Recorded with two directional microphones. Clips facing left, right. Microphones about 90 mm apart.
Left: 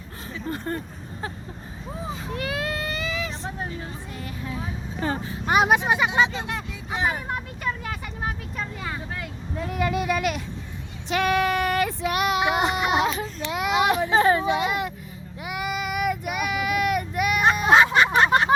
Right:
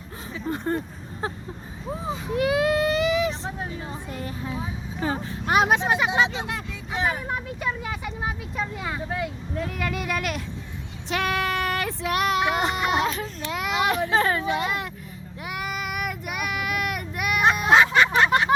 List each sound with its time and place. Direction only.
0.4 s speech: 15° right (ahead or behind)
1.2 s a sound: 25° right (ahead or behind)
4.1 s a sound: 30° right (ahead or behind)
4.9 s speech: 5° right (ahead or behind)
6.9 s speech: 15° left (ahead or behind)
7.2 s speech: centre (ahead or behind); by 9.2 s 15° right (ahead or behind)
9.6 s speech: 20° left (ahead or behind)
10.1 s speech: 5° left (ahead or behind)
15.4 s child singing: 5° left (ahead or behind)
18.2 s a sound: 35° left (ahead or behind)